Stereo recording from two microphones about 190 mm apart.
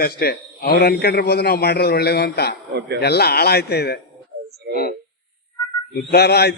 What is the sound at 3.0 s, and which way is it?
Speech, 55° left (ahead or behind).